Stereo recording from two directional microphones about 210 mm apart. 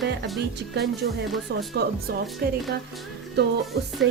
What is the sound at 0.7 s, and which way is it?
A woman's voice, 50° right (ahead or behind).